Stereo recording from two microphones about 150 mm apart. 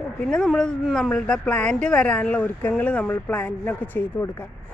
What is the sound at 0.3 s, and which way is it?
A woman's voice, 5° left (ahead or behind).